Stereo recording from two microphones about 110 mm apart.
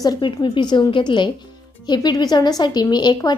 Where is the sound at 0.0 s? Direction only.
40° left (ahead or behind).